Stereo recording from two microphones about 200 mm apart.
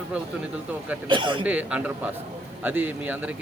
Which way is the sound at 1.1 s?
25° right (ahead or behind).